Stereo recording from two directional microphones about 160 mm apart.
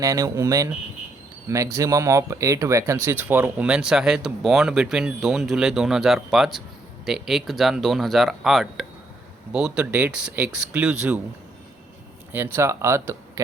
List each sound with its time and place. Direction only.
0.0 s speech: 20° right (ahead or behind)
12.3 s speech: 15° right (ahead or behind)